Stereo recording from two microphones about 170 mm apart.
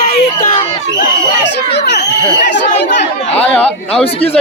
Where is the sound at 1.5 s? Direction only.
85° left.